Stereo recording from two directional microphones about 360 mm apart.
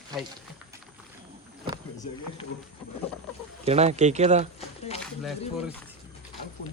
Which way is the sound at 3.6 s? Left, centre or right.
Centre.